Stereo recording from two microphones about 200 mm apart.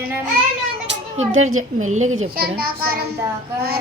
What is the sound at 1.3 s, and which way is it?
Speech, 90° right.